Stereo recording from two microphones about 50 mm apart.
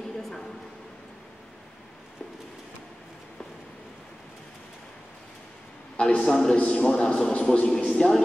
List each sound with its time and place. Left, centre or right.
0.2 s a sound: centre
5.9 s a man's voice: centre
6.6 s a man's voice: left
7.9 s a man's voice: centre